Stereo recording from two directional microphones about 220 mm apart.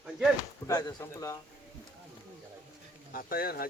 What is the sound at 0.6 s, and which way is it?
Speech, 15° left (ahead or behind).